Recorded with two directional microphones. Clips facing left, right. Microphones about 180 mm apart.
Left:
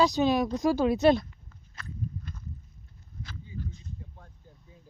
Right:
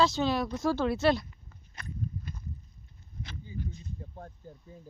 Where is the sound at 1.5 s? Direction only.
15° right (ahead or behind).